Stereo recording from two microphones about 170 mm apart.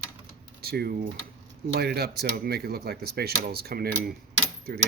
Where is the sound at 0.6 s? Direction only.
65° right (ahead or behind).